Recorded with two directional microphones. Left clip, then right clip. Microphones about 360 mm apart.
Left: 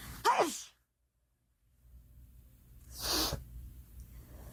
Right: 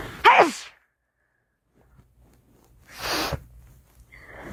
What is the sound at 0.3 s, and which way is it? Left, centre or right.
Sigh, right.